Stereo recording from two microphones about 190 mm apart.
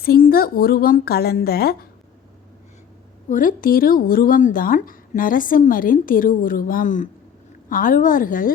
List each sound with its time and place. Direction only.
0.0 s speech: 50° left (ahead or behind)
3.2 s speech: 45° left (ahead or behind)